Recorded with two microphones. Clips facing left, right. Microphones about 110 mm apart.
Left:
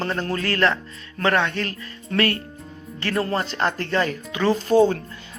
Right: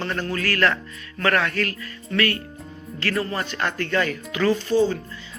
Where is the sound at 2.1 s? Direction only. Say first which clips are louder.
Left 2 dB; 35° left (ahead or behind).